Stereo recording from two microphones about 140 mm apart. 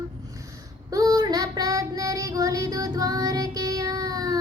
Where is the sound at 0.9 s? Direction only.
25° right (ahead or behind).